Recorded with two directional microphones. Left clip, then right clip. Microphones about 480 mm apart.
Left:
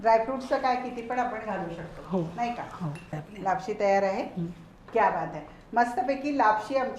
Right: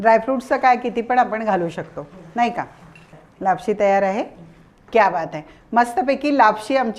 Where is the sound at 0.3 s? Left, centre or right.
Right.